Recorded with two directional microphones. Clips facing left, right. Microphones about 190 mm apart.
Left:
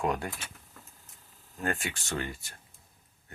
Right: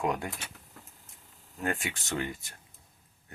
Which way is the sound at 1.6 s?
15° right (ahead or behind).